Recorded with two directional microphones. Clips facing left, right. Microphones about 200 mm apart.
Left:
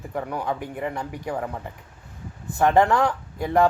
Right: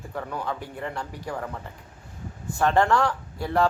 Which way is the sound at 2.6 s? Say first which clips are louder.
Left 3 dB; 15° left (ahead or behind).